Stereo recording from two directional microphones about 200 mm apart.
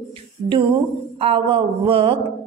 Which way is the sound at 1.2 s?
25° right (ahead or behind).